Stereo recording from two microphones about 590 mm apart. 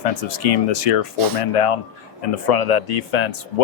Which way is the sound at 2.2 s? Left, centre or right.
Left.